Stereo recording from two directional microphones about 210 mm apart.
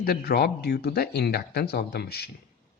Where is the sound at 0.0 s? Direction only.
45° left (ahead or behind).